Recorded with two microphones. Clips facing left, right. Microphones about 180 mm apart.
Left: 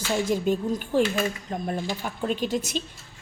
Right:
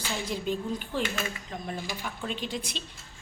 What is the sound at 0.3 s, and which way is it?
A woman's voice, 45° left (ahead or behind).